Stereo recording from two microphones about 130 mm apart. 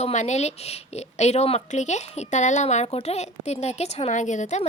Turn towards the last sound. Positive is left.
turn(degrees=65)  # may be behind; listen again after turning